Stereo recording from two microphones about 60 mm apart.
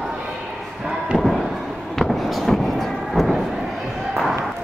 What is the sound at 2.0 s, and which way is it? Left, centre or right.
Fireworks, centre.